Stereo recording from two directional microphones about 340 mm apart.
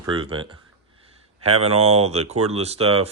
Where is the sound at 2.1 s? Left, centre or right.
Centre.